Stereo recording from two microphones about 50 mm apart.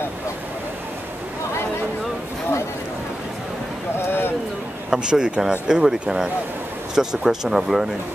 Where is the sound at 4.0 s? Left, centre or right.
Left.